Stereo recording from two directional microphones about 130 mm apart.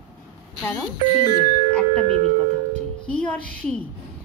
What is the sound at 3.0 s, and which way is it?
Music, 10° left (ahead or behind).